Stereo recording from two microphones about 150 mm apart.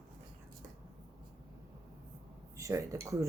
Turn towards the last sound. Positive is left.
turn(degrees=-20)  # may be behind; listen again after turning